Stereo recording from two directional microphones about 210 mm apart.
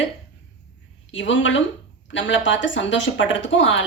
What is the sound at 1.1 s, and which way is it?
Speech, 60° left (ahead or behind).